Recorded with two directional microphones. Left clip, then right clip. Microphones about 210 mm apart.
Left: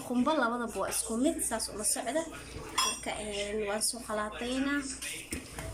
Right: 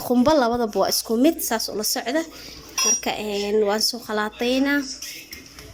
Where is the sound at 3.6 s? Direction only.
40° right (ahead or behind).